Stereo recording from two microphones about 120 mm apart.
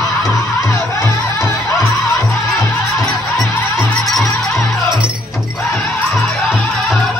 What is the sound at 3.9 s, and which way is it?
Music, centre (ahead or behind).